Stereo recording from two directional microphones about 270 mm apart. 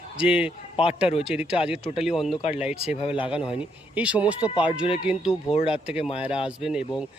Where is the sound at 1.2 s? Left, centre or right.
Centre.